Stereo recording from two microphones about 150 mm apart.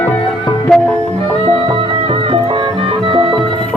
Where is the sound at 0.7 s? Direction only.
Centre (ahead or behind).